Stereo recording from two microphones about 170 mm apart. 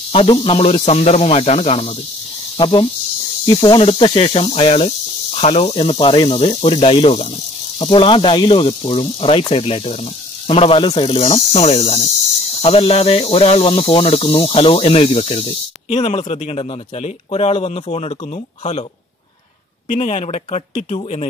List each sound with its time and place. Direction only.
0.1 s speech: 30° left (ahead or behind)
19.9 s speech: 45° left (ahead or behind)